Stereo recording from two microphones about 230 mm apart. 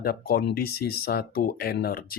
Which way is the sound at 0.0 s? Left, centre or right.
Left.